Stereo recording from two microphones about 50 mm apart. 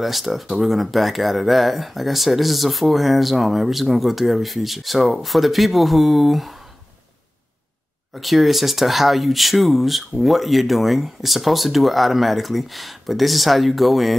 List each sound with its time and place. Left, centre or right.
0.0 s speech: centre
8.1 s speech: centre